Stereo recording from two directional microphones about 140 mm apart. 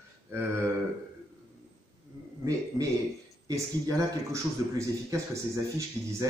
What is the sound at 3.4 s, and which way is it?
A man's voice, 25° right (ahead or behind).